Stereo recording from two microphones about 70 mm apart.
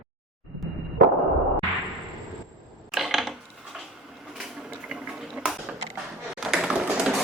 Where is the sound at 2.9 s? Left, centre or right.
Centre.